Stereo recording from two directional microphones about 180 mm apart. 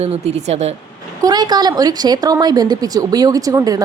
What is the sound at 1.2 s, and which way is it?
Speech, 25° right (ahead or behind).